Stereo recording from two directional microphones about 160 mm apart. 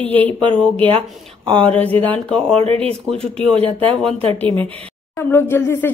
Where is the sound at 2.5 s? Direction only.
40° right (ahead or behind).